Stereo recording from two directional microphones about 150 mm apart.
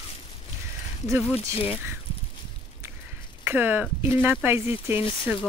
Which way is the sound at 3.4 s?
15° right (ahead or behind).